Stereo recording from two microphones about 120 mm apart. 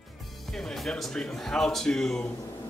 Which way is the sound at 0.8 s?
5° left (ahead or behind).